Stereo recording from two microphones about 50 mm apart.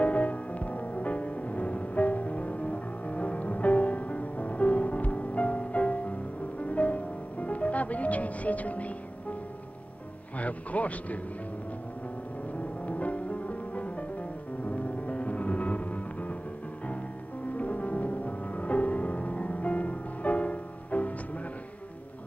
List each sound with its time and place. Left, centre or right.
0.0 s music: left
10.3 s a sound: left
12.5 s music: left
17.6 s music: left